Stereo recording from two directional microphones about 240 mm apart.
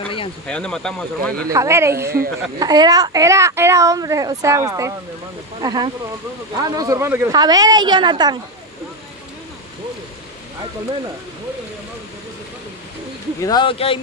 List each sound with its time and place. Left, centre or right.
0.5 s speech: centre
1.5 s a woman's voice: centre
2.0 s a woman's voice: right
2.6 s a woman's voice: centre
13.4 s speech: centre